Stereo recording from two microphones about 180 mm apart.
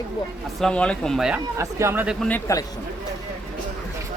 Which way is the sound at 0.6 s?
5° left (ahead or behind).